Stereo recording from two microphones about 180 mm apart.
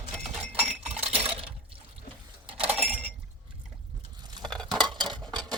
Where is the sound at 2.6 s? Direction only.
10° right (ahead or behind).